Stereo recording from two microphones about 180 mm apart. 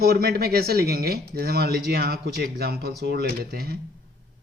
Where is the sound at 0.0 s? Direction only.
60° right (ahead or behind).